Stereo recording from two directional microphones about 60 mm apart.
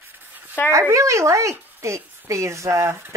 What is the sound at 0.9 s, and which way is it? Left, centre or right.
Speech, right.